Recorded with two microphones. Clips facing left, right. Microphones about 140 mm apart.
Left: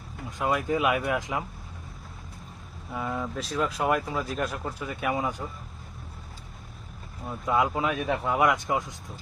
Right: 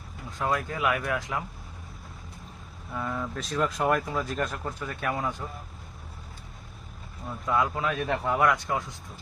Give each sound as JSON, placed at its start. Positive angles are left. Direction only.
{"t": 0.3, "sound": "speech", "side_deg": 15}
{"t": 2.9, "sound": "speech", "side_deg": 10}
{"t": 7.4, "sound": "speech", "side_deg": 20}
{"t": 8.0, "sound": "a man's voice", "side_deg": 5}
{"t": 8.4, "sound": "speech", "side_deg": 15}